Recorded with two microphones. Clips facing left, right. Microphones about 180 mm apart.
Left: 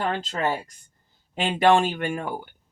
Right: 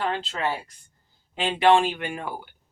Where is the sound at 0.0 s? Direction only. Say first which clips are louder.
Left 1 dB; 40° left (ahead or behind).